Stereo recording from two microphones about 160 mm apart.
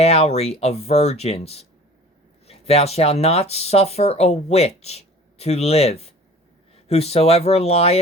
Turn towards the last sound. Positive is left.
turn(degrees=40)  # may be behind; listen again after turning